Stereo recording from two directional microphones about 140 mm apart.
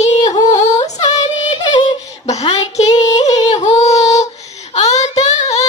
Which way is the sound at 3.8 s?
55° left (ahead or behind).